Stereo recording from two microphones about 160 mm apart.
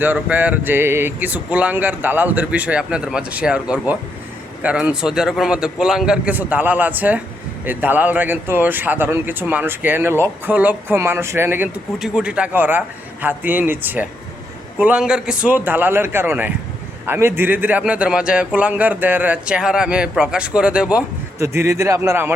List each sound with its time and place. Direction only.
0.0 s a man's voice: 10° right (ahead or behind)
21.3 s speech: 15° right (ahead or behind)